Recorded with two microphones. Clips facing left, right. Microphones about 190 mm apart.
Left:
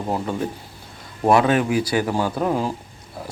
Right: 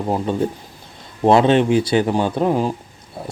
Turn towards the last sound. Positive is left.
turn(degrees=-25)  # may be behind; listen again after turning